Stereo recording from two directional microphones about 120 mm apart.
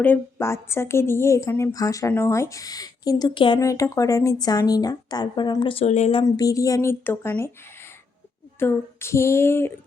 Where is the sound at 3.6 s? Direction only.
25° left (ahead or behind); by 5.8 s 40° left (ahead or behind).